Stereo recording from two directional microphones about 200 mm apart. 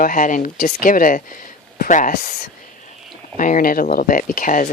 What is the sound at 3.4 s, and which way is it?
Speech, 40° left (ahead or behind).